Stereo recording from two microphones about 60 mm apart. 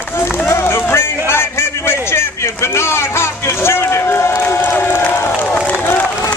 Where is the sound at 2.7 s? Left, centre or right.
Left.